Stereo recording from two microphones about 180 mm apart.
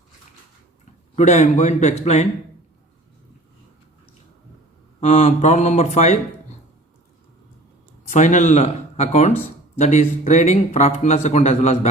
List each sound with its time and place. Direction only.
1.1 s speech: 40° left (ahead or behind)
4.9 s speech: 35° left (ahead or behind)
8.1 s speech: 40° left (ahead or behind)